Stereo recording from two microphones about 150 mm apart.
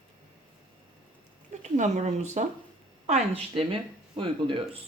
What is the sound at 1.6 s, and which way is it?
Speech, 50° right (ahead or behind).